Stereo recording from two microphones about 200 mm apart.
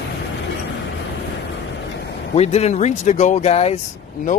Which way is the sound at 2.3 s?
30° left (ahead or behind).